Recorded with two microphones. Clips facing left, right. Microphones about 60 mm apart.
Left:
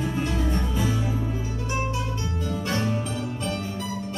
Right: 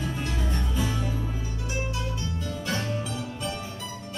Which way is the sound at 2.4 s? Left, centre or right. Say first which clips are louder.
Left 6 dB; left.